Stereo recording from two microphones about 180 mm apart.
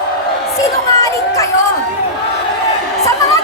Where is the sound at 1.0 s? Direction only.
20° left (ahead or behind).